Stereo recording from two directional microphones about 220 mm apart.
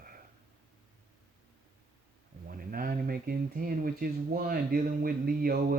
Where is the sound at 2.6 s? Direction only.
40° right (ahead or behind).